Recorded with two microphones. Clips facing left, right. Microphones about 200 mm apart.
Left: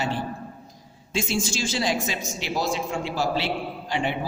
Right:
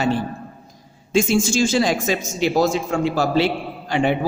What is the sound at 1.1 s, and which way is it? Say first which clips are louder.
A woman's voice: right 9 dB; 50° right (ahead or behind).